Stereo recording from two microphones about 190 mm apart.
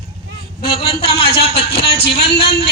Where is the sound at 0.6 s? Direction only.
30° left (ahead or behind).